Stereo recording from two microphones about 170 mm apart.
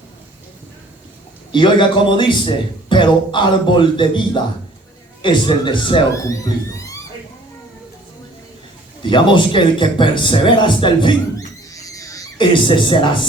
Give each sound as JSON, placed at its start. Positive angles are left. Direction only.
{"t": 1.5, "sound": "speech", "side_deg": 30}
{"t": 5.2, "sound": "speech", "side_deg": 30}
{"t": 6.2, "sound": "speech", "side_deg": 20}
{"t": 9.0, "sound": "a man's voice", "side_deg": 30}